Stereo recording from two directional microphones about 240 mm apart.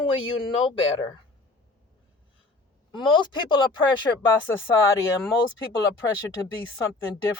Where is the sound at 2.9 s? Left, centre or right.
Centre.